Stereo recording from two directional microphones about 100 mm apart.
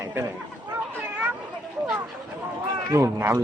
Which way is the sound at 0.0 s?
30° right (ahead or behind).